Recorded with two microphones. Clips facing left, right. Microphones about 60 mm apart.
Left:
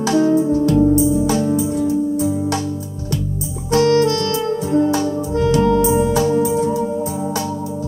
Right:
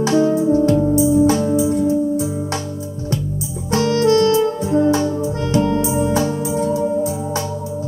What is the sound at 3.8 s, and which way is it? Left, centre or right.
Music, left.